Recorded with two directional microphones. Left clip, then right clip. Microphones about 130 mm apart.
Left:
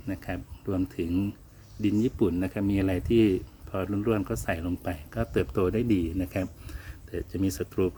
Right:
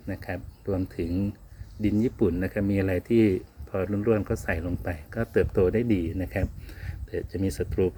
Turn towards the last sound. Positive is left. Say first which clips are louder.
# right 1 dB
turn(degrees=25)  # may be behind; listen again after turning